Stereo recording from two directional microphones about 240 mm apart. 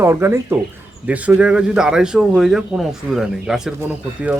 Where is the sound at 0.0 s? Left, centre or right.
Centre.